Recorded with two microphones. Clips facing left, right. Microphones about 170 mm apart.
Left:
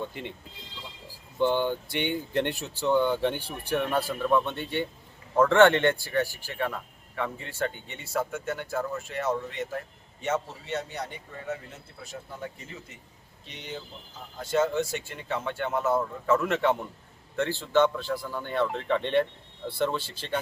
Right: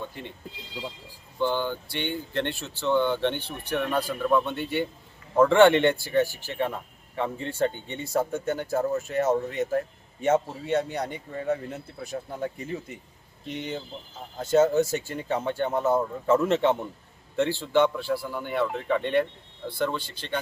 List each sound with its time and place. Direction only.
1.4 s a man's voice: 20° left (ahead or behind); by 9.6 s 45° right (ahead or behind)
10.7 s speech: 55° right (ahead or behind)
13.5 s speech: 50° right (ahead or behind)
14.3 s a man's voice: 40° right (ahead or behind); by 20.4 s 5° left (ahead or behind)